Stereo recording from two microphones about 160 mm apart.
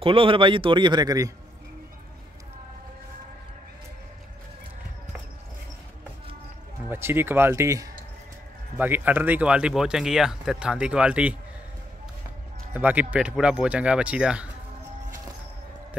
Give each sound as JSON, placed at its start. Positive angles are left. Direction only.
{"t": 0.0, "sound": "a man's voice", "side_deg": -35}
{"t": 6.9, "sound": "speech", "side_deg": -15}
{"t": 12.7, "sound": "speech", "side_deg": -10}